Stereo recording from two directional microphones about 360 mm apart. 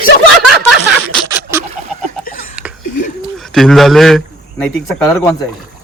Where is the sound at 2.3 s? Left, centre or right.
Left.